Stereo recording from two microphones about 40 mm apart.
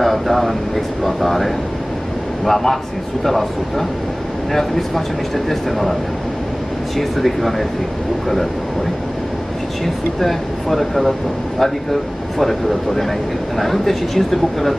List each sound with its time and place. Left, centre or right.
0.0 s speech: centre
7.0 s speech: centre
10.2 s speech: centre